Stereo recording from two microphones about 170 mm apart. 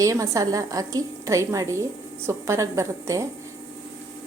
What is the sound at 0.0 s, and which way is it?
A woman's voice, 20° right (ahead or behind).